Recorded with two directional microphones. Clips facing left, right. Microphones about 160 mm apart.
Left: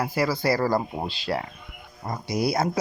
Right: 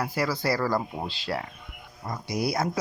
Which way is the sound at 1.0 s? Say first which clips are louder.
Left 3 dB; 15° left (ahead or behind).